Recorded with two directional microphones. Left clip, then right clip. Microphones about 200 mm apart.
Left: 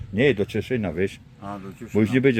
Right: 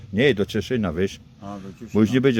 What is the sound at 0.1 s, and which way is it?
A man's voice, 5° right (ahead or behind).